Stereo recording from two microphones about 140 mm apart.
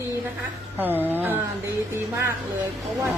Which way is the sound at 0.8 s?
15° right (ahead or behind).